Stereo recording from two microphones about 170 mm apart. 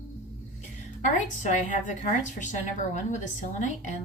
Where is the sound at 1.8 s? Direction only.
45° left (ahead or behind).